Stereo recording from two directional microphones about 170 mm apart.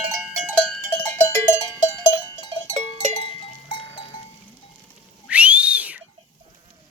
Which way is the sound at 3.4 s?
30° left (ahead or behind).